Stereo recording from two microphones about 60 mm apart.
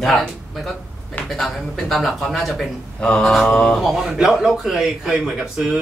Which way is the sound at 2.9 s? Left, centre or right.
Centre.